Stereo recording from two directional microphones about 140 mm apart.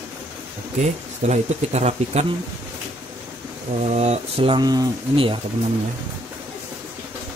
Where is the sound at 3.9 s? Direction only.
50° right (ahead or behind).